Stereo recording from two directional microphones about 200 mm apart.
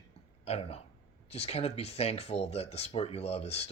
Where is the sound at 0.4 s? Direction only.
30° left (ahead or behind).